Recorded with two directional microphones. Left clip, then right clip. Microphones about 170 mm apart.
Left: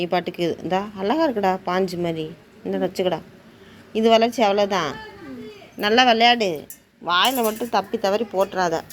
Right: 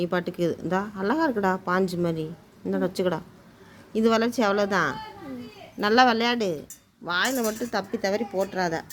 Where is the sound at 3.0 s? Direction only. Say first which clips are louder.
Left 4 dB; 25° right (ahead or behind).